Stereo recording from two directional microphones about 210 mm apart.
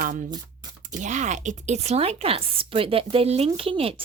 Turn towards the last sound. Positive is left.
turn(degrees=-25)  # may be behind; listen again after turning